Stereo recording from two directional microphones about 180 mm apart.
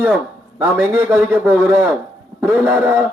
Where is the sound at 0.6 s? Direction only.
10° right (ahead or behind).